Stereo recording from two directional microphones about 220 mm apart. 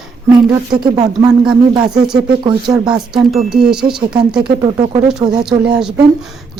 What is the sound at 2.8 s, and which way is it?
Speech, 5° right (ahead or behind).